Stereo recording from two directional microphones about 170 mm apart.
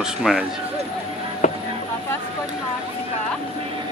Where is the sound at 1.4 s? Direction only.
45° left (ahead or behind).